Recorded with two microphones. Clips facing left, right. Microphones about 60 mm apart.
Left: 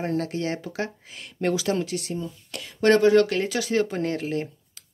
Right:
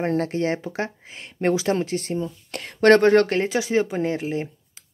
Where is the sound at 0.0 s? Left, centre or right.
Right.